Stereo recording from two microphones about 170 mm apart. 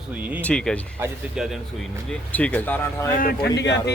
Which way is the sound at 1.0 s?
15° right (ahead or behind).